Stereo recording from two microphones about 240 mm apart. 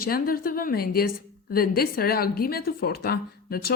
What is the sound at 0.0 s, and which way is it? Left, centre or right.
A woman's voice, left.